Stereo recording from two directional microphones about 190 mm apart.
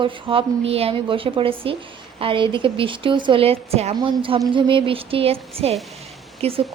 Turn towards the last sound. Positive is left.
turn(degrees=-30)  # may be behind; listen again after turning